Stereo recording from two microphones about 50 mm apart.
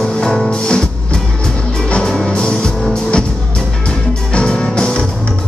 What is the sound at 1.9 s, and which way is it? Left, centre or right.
Music, centre.